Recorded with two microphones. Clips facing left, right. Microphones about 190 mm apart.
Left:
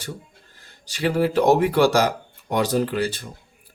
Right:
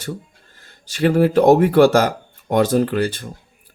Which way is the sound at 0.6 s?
50° right (ahead or behind).